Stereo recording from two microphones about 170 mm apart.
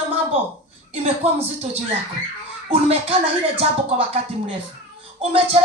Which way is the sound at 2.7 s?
35° right (ahead or behind).